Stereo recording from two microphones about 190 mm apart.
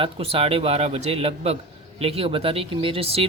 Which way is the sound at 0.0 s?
30° right (ahead or behind).